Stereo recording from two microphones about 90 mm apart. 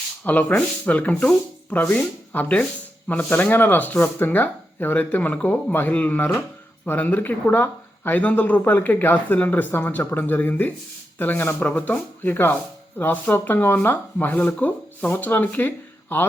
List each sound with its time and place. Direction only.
0.3 s speech: 15° left (ahead or behind)